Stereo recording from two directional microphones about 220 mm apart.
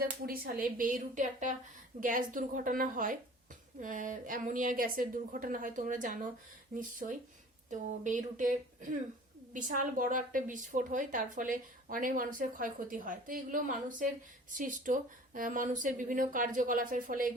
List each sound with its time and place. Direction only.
0.0 s a woman's voice: 40° right (ahead or behind)